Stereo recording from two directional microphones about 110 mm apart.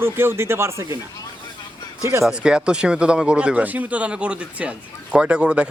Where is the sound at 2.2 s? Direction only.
5° right (ahead or behind).